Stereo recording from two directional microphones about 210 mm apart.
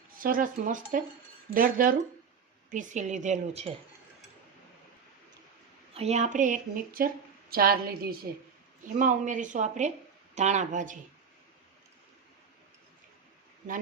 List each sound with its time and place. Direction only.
0.2 s speech: 40° right (ahead or behind)
5.9 s a woman's voice: 30° right (ahead or behind)